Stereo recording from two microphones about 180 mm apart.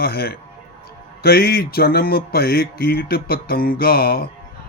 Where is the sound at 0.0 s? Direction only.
60° left (ahead or behind).